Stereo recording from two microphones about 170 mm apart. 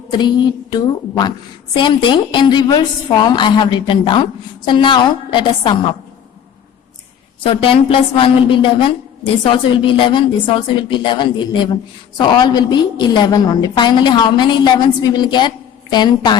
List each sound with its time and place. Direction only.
0.2 s a woman's voice: 25° left (ahead or behind)
7.4 s a woman's voice: 30° left (ahead or behind)